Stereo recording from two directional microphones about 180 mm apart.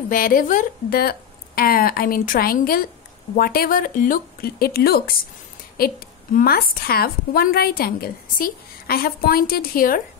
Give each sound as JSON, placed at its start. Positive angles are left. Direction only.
{"t": 0.1, "sound": "a woman's voice", "side_deg": 50}